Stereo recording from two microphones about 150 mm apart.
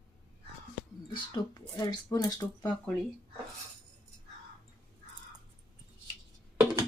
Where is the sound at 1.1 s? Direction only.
30° left (ahead or behind).